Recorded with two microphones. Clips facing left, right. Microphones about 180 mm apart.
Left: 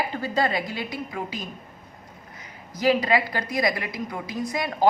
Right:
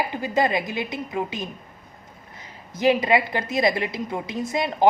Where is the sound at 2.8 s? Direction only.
20° right (ahead or behind).